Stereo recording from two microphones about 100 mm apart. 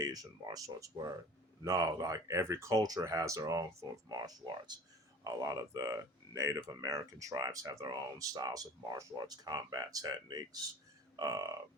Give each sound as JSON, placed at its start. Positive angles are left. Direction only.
{"t": 0.0, "sound": "speech", "side_deg": -40}